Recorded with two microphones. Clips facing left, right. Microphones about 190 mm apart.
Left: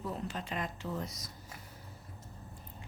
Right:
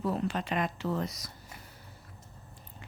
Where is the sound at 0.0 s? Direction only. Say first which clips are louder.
Right 7 dB; 80° right.